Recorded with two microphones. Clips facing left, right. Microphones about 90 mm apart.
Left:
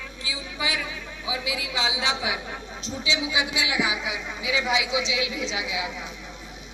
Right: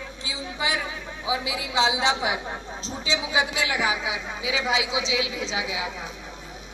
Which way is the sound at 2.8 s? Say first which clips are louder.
Left 1 dB; 40° right (ahead or behind).